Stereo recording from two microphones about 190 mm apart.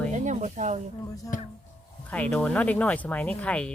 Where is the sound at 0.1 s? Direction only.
40° right (ahead or behind).